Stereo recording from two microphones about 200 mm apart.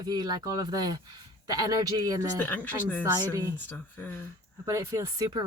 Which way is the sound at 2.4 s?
10° left (ahead or behind).